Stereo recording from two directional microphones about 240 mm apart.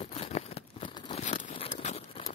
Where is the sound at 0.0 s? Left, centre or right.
Left.